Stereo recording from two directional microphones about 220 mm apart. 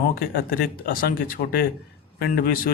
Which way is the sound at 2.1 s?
40° left (ahead or behind).